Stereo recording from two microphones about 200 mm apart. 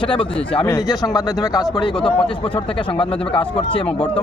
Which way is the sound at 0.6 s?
20° left (ahead or behind).